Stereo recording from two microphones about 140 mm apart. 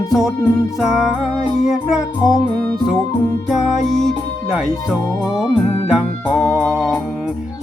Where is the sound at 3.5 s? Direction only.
Centre (ahead or behind).